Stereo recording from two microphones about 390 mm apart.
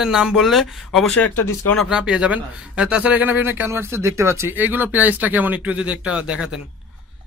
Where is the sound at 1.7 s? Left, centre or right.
Centre.